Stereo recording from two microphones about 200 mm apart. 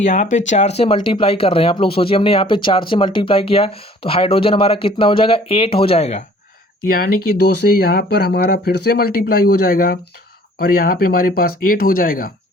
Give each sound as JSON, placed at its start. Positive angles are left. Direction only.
{"t": 0.0, "sound": "speech", "side_deg": 40}
{"t": 6.8, "sound": "speech", "side_deg": 45}